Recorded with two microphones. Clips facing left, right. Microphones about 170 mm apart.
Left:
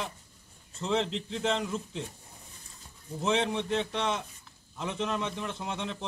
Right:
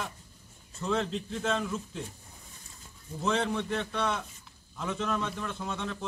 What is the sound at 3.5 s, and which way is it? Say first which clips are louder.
A man's voice: left 1 dB; 20° left (ahead or behind).